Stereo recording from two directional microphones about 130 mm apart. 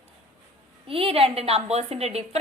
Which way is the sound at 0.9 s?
45° right (ahead or behind).